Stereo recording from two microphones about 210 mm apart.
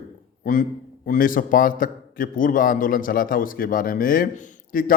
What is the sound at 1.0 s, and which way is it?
A man's voice, 40° left (ahead or behind).